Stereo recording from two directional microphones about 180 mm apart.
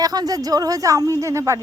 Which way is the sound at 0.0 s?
20° right (ahead or behind).